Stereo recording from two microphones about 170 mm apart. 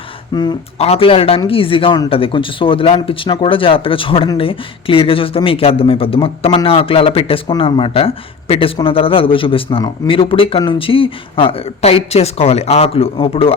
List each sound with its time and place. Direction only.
0.3 s speech: 25° left (ahead or behind)
0.8 s speech: 35° left (ahead or behind)